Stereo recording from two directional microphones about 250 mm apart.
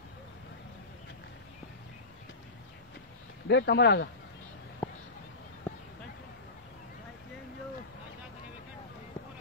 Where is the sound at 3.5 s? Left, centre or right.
Left.